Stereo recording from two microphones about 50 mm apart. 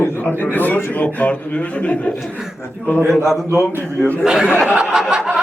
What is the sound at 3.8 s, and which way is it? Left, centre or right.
Speech, left.